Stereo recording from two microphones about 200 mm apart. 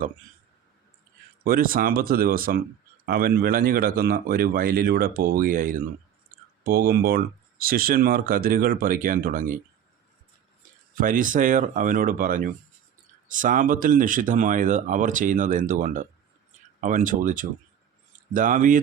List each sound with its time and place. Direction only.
1.5 s speech: 45° right (ahead or behind)
10.9 s speech: 40° right (ahead or behind)